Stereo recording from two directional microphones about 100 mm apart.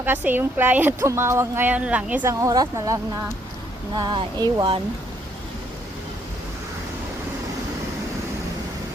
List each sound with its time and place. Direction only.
0.0 s a woman's voice: 20° right (ahead or behind)
2.2 s speech: 35° right (ahead or behind)
3.9 s speech: 50° right (ahead or behind)